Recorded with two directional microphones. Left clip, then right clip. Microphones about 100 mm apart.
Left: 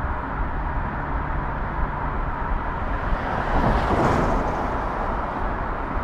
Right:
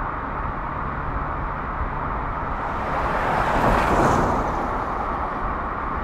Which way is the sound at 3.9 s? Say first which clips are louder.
Right 2 dB; 15° right (ahead or behind).